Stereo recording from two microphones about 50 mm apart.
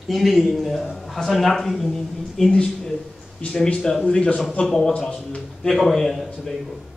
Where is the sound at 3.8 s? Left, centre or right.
Centre.